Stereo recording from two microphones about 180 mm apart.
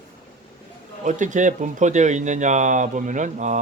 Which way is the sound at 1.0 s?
45° right (ahead or behind).